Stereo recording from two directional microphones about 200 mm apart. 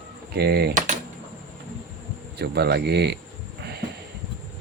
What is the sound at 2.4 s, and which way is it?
Speech, 55° right (ahead or behind).